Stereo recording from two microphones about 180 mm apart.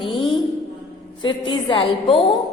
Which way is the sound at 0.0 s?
30° left (ahead or behind).